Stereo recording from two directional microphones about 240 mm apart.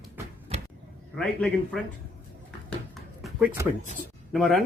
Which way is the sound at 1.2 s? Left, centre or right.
Centre.